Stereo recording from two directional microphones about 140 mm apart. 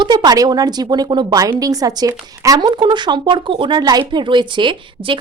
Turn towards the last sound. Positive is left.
turn(degrees=-35)  # may be behind; listen again after turning